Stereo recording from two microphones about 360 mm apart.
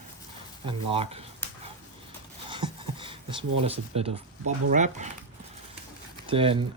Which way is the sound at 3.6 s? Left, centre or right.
Centre.